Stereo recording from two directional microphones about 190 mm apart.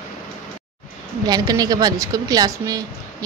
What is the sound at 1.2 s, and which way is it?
A woman's voice, 20° right (ahead or behind).